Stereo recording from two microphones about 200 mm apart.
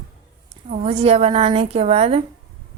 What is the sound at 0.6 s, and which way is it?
Speech, 30° right (ahead or behind).